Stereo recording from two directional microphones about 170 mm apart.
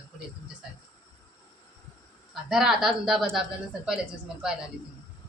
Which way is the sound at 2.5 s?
5° right (ahead or behind).